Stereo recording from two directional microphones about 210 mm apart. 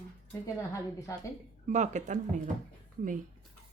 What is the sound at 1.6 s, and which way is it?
Speech, 35° right (ahead or behind).